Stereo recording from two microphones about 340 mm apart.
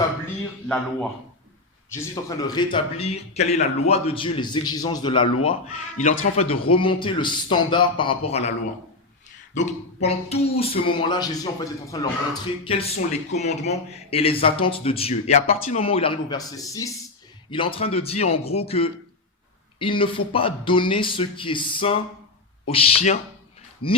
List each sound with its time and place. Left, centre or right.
2.0 s speech: centre
9.6 s speech: centre
23.8 s speech: left